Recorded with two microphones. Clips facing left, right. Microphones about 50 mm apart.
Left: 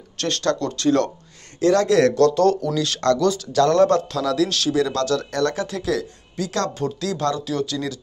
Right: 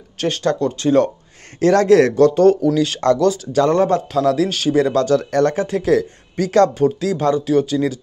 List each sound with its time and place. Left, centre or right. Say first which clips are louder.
0.2 s speech: right 4 dB; centre
1.6 s a man's voice: right 4 dB; right
2.1 s speech: right 4 dB; right
4.2 s a man's voice: right 4 dB; right
6.7 s speech: right 8 dB; centre